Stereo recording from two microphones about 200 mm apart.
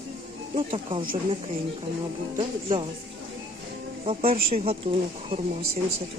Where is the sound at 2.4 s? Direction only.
25° right (ahead or behind).